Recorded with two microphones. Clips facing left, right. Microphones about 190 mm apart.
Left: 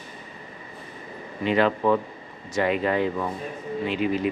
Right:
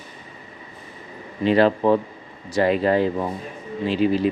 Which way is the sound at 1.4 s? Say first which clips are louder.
Right 4 dB; 35° right (ahead or behind).